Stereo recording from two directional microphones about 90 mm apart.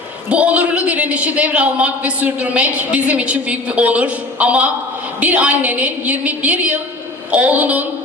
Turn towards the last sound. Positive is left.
turn(degrees=-20)  # may be behind; listen again after turning